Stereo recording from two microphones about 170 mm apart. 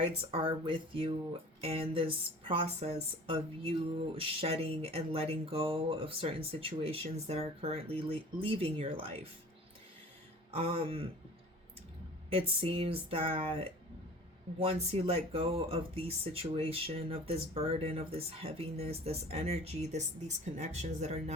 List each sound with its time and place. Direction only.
0.0 s speech: 35° right (ahead or behind)
10.5 s speech: 35° right (ahead or behind)
12.3 s speech: 35° right (ahead or behind)
14.6 s speech: 35° right (ahead or behind)